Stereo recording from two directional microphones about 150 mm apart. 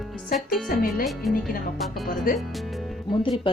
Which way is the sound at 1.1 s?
Centre (ahead or behind).